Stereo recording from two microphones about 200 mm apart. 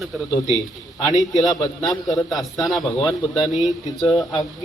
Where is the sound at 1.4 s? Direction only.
20° left (ahead or behind).